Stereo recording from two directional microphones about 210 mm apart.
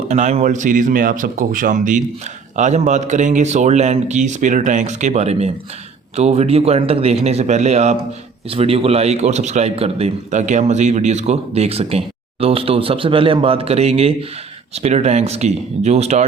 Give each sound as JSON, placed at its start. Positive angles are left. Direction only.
{"t": 0.1, "sound": "a man's voice", "side_deg": -35}